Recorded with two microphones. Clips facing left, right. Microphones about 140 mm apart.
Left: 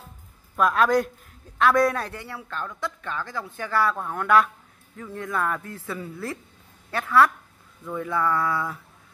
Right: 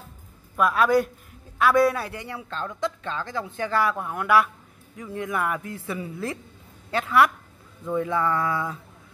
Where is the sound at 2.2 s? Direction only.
20° right (ahead or behind).